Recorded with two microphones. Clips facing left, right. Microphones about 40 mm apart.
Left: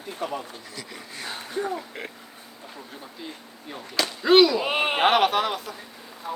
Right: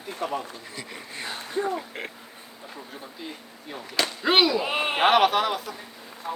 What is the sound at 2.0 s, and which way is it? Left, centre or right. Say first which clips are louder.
Speech: right 1 dB; right.